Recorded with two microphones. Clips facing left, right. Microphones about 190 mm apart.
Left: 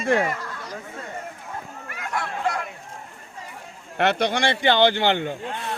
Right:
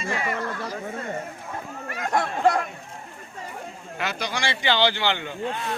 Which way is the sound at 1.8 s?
40° right (ahead or behind).